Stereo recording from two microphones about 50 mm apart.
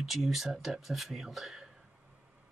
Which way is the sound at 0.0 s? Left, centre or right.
Centre.